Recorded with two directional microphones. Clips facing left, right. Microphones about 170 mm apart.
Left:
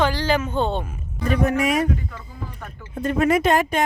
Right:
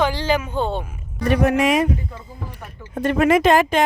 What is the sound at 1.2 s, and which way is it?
Speech, 85° right.